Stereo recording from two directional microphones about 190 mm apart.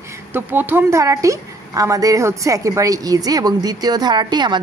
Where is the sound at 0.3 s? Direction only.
10° right (ahead or behind).